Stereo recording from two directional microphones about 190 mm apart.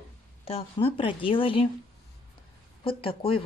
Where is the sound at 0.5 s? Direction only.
30° left (ahead or behind).